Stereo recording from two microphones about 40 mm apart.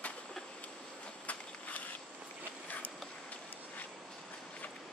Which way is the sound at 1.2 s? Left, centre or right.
Left.